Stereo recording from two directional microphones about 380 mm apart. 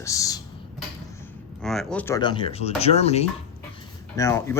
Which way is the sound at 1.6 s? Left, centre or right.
Centre.